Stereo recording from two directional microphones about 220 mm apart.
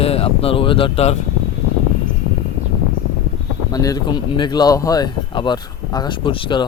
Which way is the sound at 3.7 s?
15° left (ahead or behind).